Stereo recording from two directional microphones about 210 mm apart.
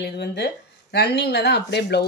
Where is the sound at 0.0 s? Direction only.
50° left (ahead or behind).